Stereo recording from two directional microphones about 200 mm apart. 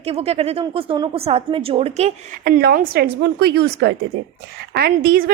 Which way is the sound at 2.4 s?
55° right (ahead or behind).